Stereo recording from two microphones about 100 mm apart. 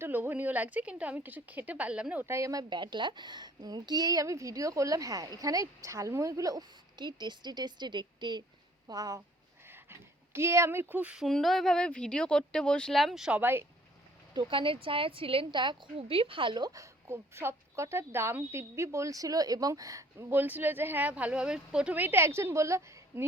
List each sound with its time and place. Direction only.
0.0 s speech: 20° right (ahead or behind)
2.2 s a woman's voice: 30° right (ahead or behind); by 8.4 s 50° right (ahead or behind)
8.9 s a woman's voice: 35° right (ahead or behind)
9.6 s speech: 25° right (ahead or behind)
11.2 s speech: centre (ahead or behind)
13.4 s speech: 20° right (ahead or behind)
14.3 s a woman's voice: 60° right (ahead or behind); by 20.2 s 35° right (ahead or behind)
20.3 s speech: 20° right (ahead or behind)